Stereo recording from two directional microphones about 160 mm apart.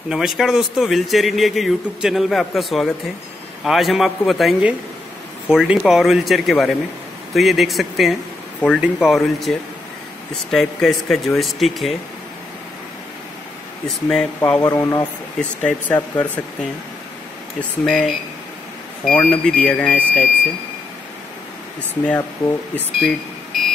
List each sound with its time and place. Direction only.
0.1 s speech: centre (ahead or behind)
13.8 s speech: 5° left (ahead or behind)
14.6 s speech: 20° left (ahead or behind)
17.6 s speech: 5° left (ahead or behind)
22.9 s a sound: centre (ahead or behind)